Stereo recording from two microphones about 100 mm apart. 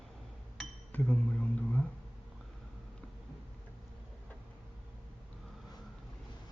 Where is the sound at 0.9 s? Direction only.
15° left (ahead or behind).